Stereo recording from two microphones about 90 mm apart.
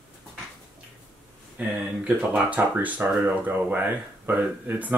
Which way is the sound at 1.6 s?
15° right (ahead or behind).